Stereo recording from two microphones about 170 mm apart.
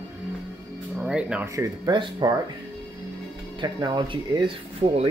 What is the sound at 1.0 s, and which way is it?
Speech, 5° right (ahead or behind).